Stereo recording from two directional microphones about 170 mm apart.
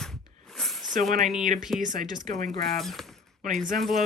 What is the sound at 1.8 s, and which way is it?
Speech, 50° right (ahead or behind).